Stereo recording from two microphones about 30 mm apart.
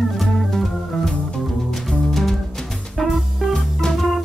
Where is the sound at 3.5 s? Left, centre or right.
Centre.